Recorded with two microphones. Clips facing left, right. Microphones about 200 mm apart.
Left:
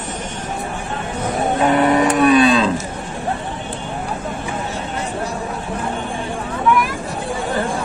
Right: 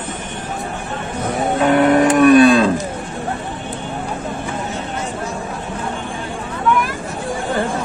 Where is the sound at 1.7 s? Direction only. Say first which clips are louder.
Right 4 dB; 55° right (ahead or behind).